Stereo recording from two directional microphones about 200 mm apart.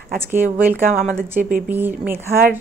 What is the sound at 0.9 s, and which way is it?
Speech, 50° right (ahead or behind).